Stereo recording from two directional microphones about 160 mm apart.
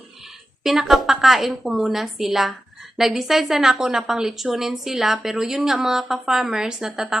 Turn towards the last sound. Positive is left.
turn(degrees=-5)  # may be behind; listen again after turning